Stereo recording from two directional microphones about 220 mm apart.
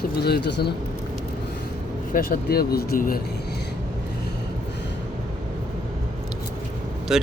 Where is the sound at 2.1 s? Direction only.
40° left (ahead or behind).